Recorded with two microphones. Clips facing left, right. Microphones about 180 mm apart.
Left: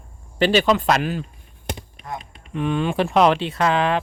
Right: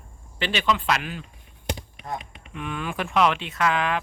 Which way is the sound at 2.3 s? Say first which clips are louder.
Left 10 dB; 35° left (ahead or behind).